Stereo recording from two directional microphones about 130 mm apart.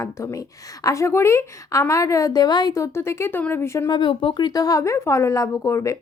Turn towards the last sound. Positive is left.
turn(degrees=25)  # may be behind; listen again after turning